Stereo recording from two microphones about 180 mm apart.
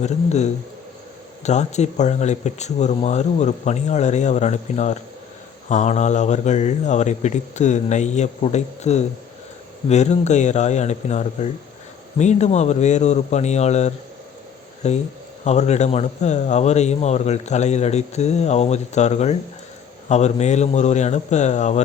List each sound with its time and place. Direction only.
0.0 s a man's voice: 40° left (ahead or behind)